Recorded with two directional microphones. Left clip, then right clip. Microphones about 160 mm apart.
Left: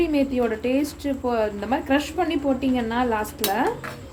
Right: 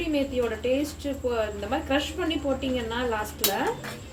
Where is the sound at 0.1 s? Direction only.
90° left.